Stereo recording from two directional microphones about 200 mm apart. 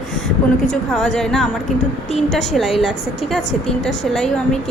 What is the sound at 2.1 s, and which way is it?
Speech, 35° left (ahead or behind).